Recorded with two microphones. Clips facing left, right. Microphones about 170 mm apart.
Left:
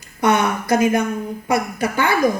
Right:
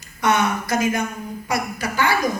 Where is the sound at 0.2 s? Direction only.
55° left (ahead or behind).